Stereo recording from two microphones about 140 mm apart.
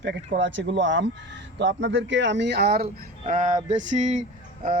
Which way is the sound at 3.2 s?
60° right (ahead or behind).